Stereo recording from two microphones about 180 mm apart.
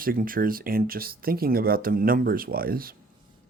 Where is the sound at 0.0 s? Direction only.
50° right (ahead or behind).